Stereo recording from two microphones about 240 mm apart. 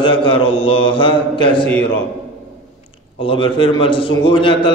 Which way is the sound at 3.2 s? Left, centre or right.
Left.